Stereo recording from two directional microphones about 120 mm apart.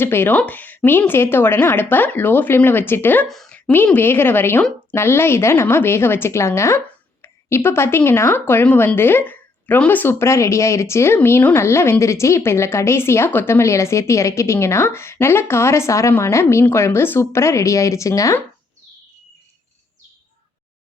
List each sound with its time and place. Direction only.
0.0 s a woman's voice: 20° left (ahead or behind)
3.2 s a sound: 5° left (ahead or behind)
3.8 s a woman's voice: 20° left (ahead or behind)